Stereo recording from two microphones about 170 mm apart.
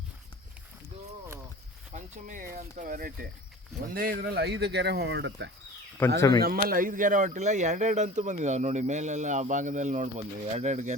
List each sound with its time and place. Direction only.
1.9 s speech: 45° right (ahead or behind); by 5.5 s 90° right
6.1 s speech: 20° left (ahead or behind)
6.4 s speech: 60° right (ahead or behind); by 10.9 s 45° right (ahead or behind)